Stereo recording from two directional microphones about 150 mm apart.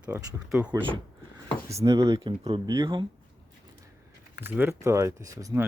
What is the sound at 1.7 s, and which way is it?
Speech, 20° right (ahead or behind).